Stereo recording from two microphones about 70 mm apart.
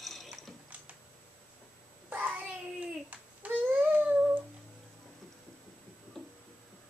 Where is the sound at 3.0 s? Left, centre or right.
Right.